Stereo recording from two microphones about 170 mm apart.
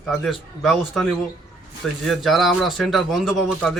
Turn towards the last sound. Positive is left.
turn(degrees=0)  # may be behind; listen again after turning